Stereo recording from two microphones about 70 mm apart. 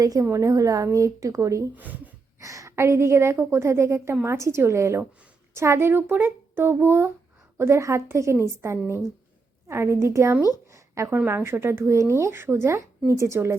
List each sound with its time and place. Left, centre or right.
0.0 s a woman's voice: right
1.7 s speech: right
2.4 s a woman's voice: right
7.6 s a woman's voice: right
10.7 s a sound: right
11.3 s a woman's voice: right